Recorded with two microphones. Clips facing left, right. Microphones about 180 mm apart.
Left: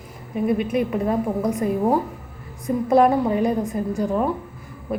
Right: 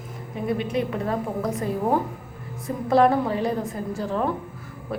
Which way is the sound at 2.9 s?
15° left (ahead or behind).